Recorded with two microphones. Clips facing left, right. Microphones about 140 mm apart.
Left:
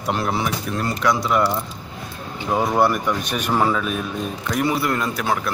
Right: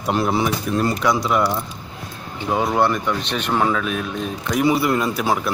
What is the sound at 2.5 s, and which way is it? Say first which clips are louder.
Speech: even; centre (ahead or behind).